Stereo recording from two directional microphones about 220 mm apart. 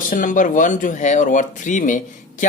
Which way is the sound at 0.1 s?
35° left (ahead or behind).